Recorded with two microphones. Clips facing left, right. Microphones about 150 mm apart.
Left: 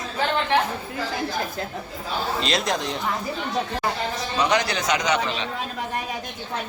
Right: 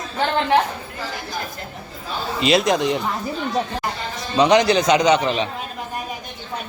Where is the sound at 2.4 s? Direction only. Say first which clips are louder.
Right 11 dB; 5° right (ahead or behind).